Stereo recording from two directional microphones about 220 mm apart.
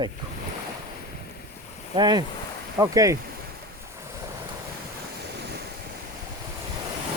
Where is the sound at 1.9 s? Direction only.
20° right (ahead or behind).